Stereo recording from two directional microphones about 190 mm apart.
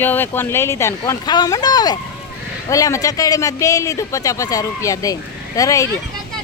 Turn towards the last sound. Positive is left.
turn(degrees=15)  # may be behind; listen again after turning